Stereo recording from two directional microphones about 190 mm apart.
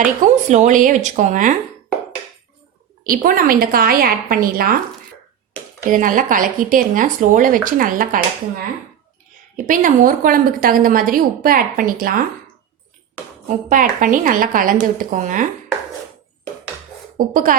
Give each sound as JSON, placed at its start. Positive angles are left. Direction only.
{"t": 0.0, "sound": "speech", "side_deg": -40}
{"t": 3.0, "sound": "speech", "side_deg": -50}
{"t": 5.9, "sound": "speech", "side_deg": -45}
{"t": 9.6, "sound": "speech", "side_deg": -45}
{"t": 13.7, "sound": "speech", "side_deg": -45}
{"t": 17.2, "sound": "speech", "side_deg": -45}